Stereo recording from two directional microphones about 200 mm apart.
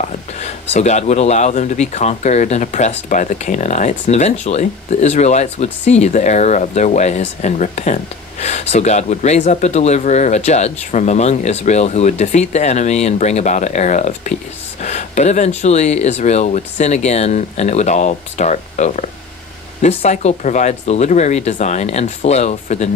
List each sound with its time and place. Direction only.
0.4 s speech: 35° left (ahead or behind)